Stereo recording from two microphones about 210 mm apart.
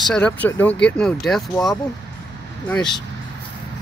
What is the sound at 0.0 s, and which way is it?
Speech, 5° left (ahead or behind).